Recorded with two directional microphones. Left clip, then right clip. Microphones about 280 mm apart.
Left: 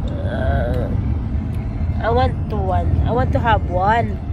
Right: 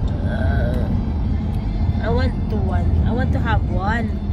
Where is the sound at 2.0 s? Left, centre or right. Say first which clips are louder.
Left 6 dB; centre.